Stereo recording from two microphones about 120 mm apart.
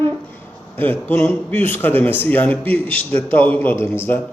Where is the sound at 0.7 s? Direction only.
15° left (ahead or behind).